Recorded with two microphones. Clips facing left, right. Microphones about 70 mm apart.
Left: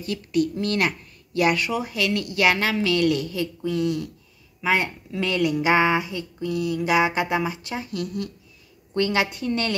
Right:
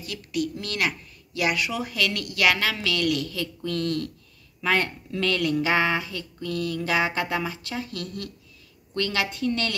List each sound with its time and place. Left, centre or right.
0.0 s a woman's voice: left
1.7 s speech: centre
3.6 s speech: centre